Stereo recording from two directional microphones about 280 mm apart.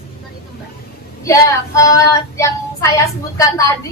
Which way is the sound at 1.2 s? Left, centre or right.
Centre.